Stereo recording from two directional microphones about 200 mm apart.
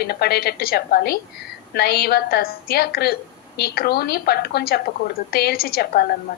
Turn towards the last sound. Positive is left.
turn(degrees=50)  # may be behind; listen again after turning